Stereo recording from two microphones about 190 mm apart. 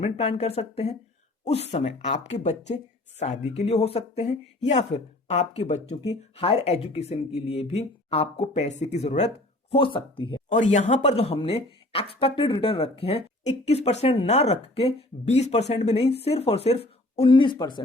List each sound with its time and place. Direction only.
0.0 s speech: 35° left (ahead or behind)
10.5 s speech: 40° left (ahead or behind); by 17.7 s 25° left (ahead or behind)